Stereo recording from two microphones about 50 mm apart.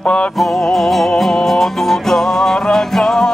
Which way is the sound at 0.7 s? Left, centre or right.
Centre.